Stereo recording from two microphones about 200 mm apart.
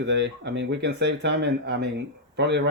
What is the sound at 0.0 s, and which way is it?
A man's voice, 60° right (ahead or behind).